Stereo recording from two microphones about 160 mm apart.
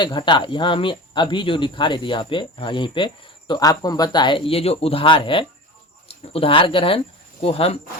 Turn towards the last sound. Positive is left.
turn(degrees=35)  # may be behind; listen again after turning